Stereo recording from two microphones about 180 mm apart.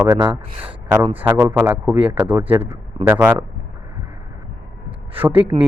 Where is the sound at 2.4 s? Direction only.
30° right (ahead or behind).